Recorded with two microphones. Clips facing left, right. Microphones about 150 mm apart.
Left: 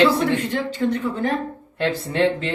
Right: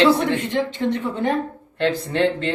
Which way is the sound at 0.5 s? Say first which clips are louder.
Right 1 dB; 20° right (ahead or behind).